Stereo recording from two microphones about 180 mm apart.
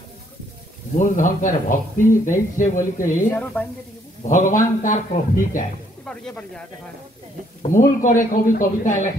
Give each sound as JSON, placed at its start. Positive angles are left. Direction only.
{"t": 0.9, "sound": "speech", "side_deg": 45}
{"t": 3.3, "sound": "a woman's voice", "side_deg": 10}
{"t": 4.2, "sound": "speech", "side_deg": 45}
{"t": 6.0, "sound": "speech", "side_deg": 5}
{"t": 7.6, "sound": "speech", "side_deg": 45}